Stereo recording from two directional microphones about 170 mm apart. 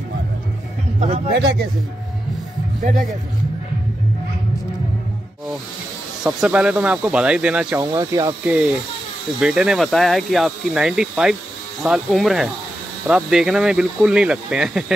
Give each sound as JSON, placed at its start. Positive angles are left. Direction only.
{"t": 1.0, "sound": "speech", "side_deg": -40}
{"t": 1.3, "sound": "speech", "side_deg": -75}
{"t": 6.2, "sound": "speech", "side_deg": -5}
{"t": 7.8, "sound": "speech", "side_deg": -20}
{"t": 9.4, "sound": "speech", "side_deg": -5}